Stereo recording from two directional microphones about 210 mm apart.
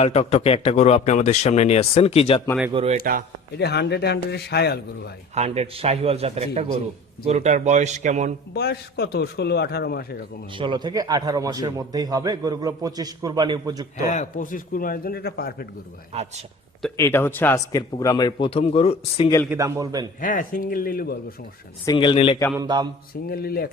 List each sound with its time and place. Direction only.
0.0 s a man's voice: 30° left (ahead or behind)
2.7 s a man's voice: 30° right (ahead or behind)
3.6 s speech: 50° left (ahead or behind)
5.3 s a man's voice: 30° right (ahead or behind)
8.5 s speech: 50° left (ahead or behind)
10.5 s a man's voice: 25° right (ahead or behind)
14.1 s speech: 35° left (ahead or behind)
17.0 s speech: 10° left (ahead or behind); by 19.3 s 30° left (ahead or behind)
19.5 s a man's voice: 15° right (ahead or behind)
20.2 s speech: 40° left (ahead or behind)
21.8 s speech: 25° left (ahead or behind)
22.5 s a man's voice: 20° right (ahead or behind)
23.3 s speech: 45° left (ahead or behind)